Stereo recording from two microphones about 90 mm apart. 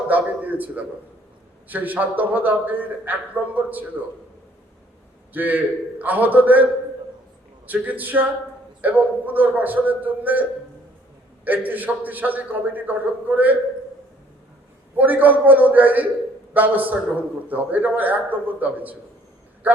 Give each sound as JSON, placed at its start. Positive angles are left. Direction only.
{"t": 0.1, "sound": "a man's voice", "side_deg": -20}
{"t": 5.3, "sound": "a man's voice", "side_deg": -20}
{"t": 7.7, "sound": "a man's voice", "side_deg": -20}
{"t": 11.4, "sound": "a man's voice", "side_deg": -20}
{"t": 14.9, "sound": "a man's voice", "side_deg": -20}